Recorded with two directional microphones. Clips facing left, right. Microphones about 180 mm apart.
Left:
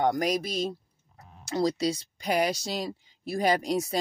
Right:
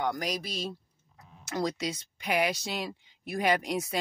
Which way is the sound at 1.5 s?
35° left (ahead or behind).